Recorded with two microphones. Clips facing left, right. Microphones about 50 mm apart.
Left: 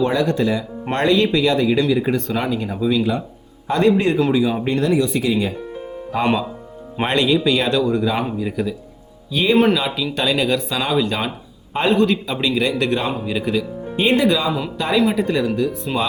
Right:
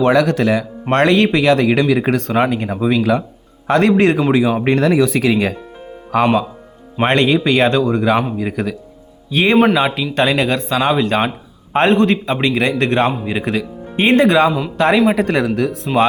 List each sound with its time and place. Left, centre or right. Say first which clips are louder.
0.0 s speech: right 5 dB; right
2.5 s speech: right 3 dB; right
3.0 s speech: right 5 dB; right
3.7 s speech: right 4 dB; right
4.6 s speech: right 4 dB; right
6.1 s speech: right 6 dB; right
7.0 s speech: right 3 dB; right